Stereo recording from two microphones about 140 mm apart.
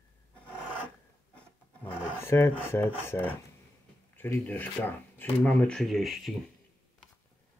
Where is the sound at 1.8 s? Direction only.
10° right (ahead or behind).